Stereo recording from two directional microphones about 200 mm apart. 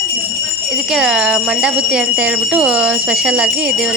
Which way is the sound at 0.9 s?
5° right (ahead or behind).